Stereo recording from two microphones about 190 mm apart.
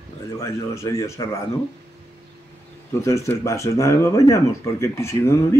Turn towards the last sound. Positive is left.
turn(degrees=15)  # may be behind; listen again after turning